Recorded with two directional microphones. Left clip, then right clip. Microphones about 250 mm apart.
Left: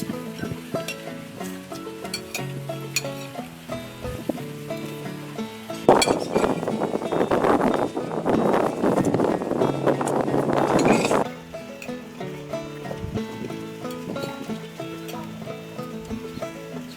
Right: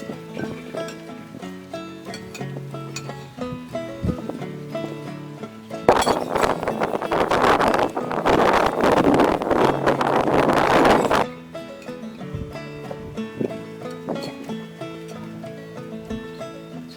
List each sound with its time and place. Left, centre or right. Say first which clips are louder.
5.8 s chink: even; centre